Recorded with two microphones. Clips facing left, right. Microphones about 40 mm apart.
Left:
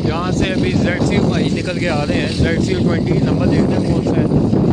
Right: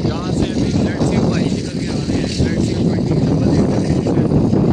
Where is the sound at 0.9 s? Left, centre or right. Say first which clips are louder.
Left 1 dB; left.